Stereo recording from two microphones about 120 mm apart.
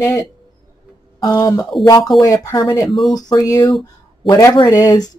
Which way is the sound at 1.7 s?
Centre (ahead or behind).